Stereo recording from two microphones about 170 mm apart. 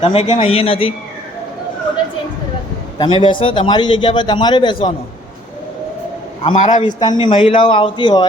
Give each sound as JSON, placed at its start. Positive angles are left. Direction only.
{"t": 0.0, "sound": "a man's voice", "side_deg": 35}
{"t": 3.0, "sound": "a man's voice", "side_deg": 30}
{"t": 6.4, "sound": "a man's voice", "side_deg": 35}